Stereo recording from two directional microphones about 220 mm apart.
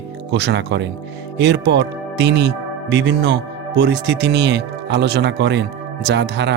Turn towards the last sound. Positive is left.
turn(degrees=-50)  # may be behind; listen again after turning